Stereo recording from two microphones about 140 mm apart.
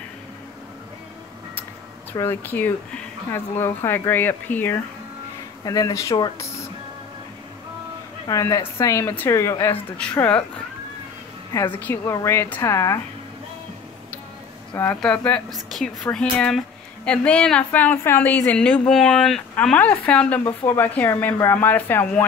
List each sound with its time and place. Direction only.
2.1 s speech: 15° left (ahead or behind)
5.6 s a woman's voice: 25° left (ahead or behind)
8.3 s a woman's voice: 25° left (ahead or behind); by 10.1 s 10° left (ahead or behind)
11.7 s a woman's voice: 15° left (ahead or behind)
15.0 s speech: 10° left (ahead or behind)